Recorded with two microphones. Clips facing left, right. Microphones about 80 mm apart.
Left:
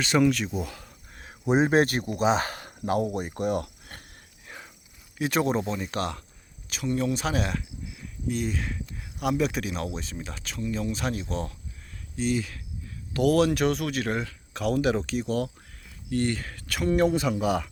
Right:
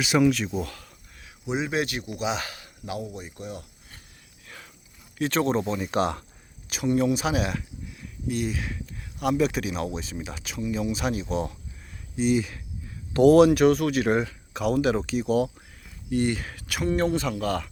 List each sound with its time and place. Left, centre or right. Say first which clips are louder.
0.0 s speech: right 1 dB; centre
0.6 s speech: right 1 dB; centre
1.2 s speech: left 6 dB; left
4.4 s a sound: left 2 dB; left
5.1 s speech: right 1 dB; centre
5.9 s speech: right 5 dB; centre
13.1 s speech: right 7 dB; right
13.4 s speech: right 6 dB; centre
14.1 s speech: right 6 dB; centre
14.5 s speech: right 1 dB; centre